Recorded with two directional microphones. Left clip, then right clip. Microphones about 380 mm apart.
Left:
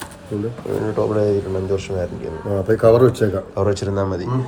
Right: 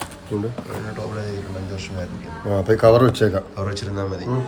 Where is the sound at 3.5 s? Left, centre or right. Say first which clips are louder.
Left 8 dB; centre.